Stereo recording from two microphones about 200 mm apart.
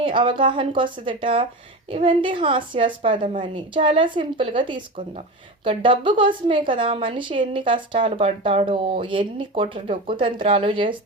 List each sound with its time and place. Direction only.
0.0 s a woman's voice: 25° right (ahead or behind)